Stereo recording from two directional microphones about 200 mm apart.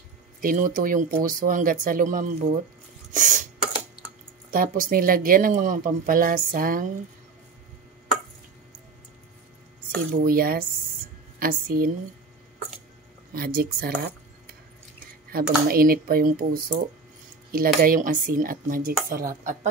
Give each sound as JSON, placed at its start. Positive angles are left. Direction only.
{"t": 0.4, "sound": "speech", "side_deg": -45}
{"t": 3.1, "sound": "a sound", "side_deg": -40}
{"t": 4.5, "sound": "speech", "side_deg": -45}
{"t": 9.9, "sound": "speech", "side_deg": -50}
{"t": 13.3, "sound": "speech", "side_deg": -45}
{"t": 15.3, "sound": "speech", "side_deg": -45}
{"t": 17.8, "sound": "speech", "side_deg": -45}